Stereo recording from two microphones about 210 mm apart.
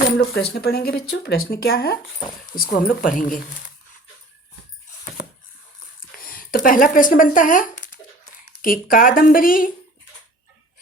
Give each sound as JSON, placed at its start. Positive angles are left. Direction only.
{"t": 0.0, "sound": "speech", "side_deg": 55}
{"t": 2.1, "sound": "speech", "side_deg": 20}
{"t": 2.6, "sound": "speech", "side_deg": 45}
{"t": 6.0, "sound": "a woman's voice", "side_deg": 45}